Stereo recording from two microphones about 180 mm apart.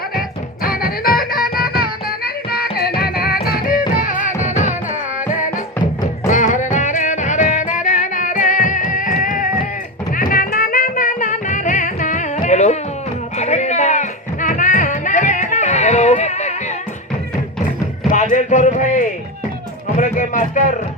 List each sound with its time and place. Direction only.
0.2 s music: 55° left (ahead or behind)
6.2 s music: 45° left (ahead or behind)
18.1 s a sound: 45° left (ahead or behind)